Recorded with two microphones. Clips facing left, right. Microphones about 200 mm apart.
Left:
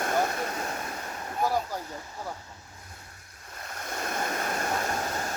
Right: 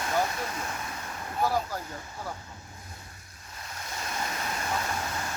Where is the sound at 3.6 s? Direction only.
55° left (ahead or behind).